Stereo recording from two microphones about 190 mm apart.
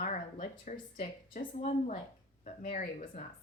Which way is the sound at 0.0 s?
45° left (ahead or behind).